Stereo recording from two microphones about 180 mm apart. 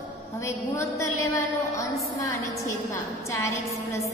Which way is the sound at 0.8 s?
15° left (ahead or behind).